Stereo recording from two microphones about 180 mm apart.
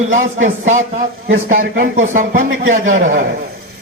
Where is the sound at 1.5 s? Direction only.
55° right (ahead or behind).